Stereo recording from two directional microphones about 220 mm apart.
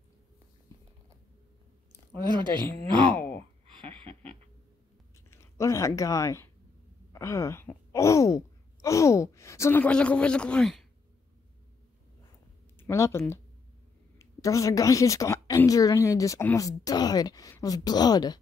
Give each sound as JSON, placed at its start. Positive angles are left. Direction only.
{"t": 2.3, "sound": "speech", "side_deg": -20}
{"t": 3.7, "sound": "a sound", "side_deg": -25}
{"t": 5.3, "sound": "speech", "side_deg": 10}
{"t": 12.7, "sound": "a woman's voice", "side_deg": 10}